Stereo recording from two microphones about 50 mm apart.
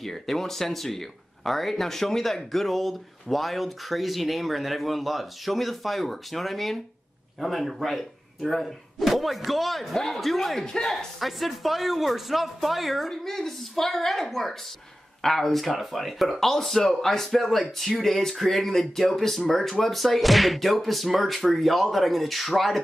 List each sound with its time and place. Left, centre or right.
0.0 s speech: centre
11.1 s speech: centre
13.1 s speech: centre